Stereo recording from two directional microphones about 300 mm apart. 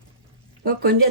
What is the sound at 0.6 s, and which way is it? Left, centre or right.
Speech, right.